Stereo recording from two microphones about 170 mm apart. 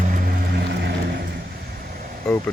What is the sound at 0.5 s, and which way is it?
Music, 90° right.